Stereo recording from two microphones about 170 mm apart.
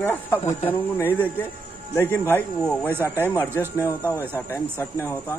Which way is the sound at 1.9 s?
10° left (ahead or behind).